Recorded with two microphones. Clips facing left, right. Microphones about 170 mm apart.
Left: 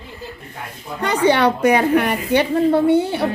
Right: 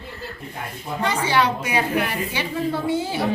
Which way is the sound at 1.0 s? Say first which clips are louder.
Left 6 dB; 65° left (ahead or behind).